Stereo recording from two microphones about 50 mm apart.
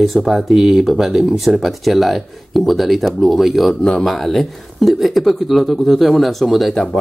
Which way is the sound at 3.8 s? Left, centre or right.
Centre.